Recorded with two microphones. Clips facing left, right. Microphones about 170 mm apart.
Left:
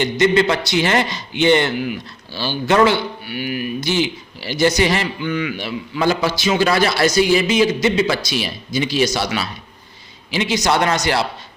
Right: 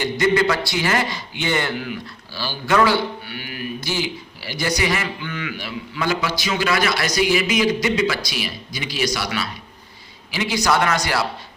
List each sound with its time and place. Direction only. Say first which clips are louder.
0.0 s a man's voice: left 3 dB; 25° left (ahead or behind)
5.2 s a man's voice: left 7 dB; 15° left (ahead or behind)